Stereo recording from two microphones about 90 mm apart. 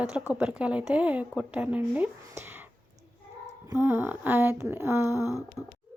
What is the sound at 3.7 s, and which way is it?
A woman's voice, 25° right (ahead or behind).